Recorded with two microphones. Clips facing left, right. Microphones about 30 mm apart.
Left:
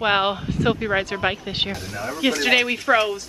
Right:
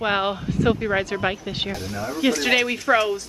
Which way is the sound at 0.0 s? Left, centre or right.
Left.